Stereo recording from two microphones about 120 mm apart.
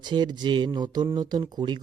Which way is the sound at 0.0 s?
35° right (ahead or behind).